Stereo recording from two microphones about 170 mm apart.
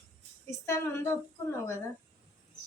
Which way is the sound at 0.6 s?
15° left (ahead or behind).